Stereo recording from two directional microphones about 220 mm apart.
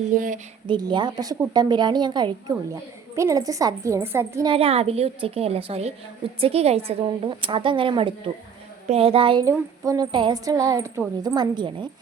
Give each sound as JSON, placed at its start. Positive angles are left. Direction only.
{"t": 0.1, "sound": "speech", "side_deg": -35}
{"t": 0.7, "sound": "a woman's voice", "side_deg": -20}
{"t": 4.4, "sound": "a woman's voice", "side_deg": -25}